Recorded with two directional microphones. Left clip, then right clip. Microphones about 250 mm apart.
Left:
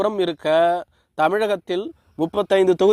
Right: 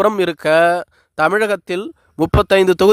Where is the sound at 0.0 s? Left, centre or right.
Right.